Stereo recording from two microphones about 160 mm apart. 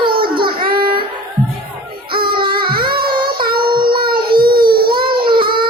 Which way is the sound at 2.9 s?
70° right (ahead or behind).